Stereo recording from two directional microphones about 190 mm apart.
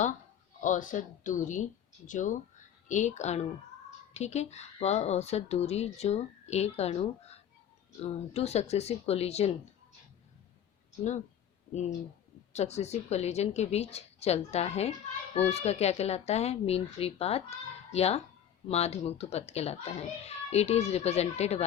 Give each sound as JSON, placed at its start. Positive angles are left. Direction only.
{"t": 0.6, "sound": "a woman's voice", "side_deg": 40}
{"t": 12.5, "sound": "a woman's voice", "side_deg": 35}